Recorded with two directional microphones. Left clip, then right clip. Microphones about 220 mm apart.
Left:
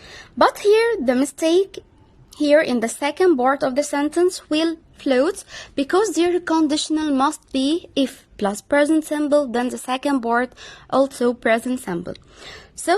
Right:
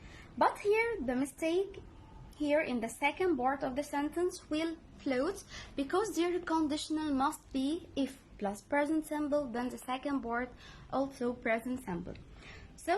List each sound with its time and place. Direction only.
0.3 s a woman's voice: 45° left (ahead or behind)